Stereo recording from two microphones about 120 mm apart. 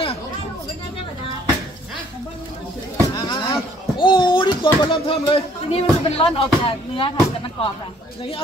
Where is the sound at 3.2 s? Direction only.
40° left (ahead or behind).